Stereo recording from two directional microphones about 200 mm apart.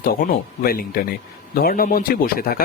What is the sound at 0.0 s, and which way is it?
Speech, 45° left (ahead or behind).